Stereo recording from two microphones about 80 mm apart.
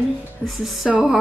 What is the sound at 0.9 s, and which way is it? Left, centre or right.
Music, centre.